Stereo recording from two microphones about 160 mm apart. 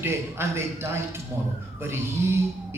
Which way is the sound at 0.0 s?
15° right (ahead or behind).